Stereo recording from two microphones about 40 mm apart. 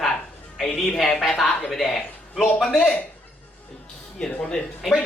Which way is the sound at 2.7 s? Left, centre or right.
Left.